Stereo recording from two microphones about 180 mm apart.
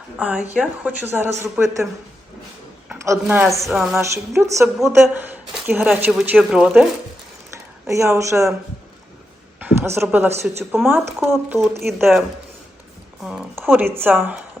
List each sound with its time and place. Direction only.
0.2 s a woman's voice: 5° right (ahead or behind)
2.9 s a woman's voice: 10° right (ahead or behind)
3.7 s speech: 5° right (ahead or behind)
3.9 s a woman's voice: 15° right (ahead or behind)
7.9 s a woman's voice: 15° right (ahead or behind)
9.6 s a woman's voice: 10° right (ahead or behind)
11.8 s speech: centre (ahead or behind)
13.2 s a woman's voice: 10° right (ahead or behind)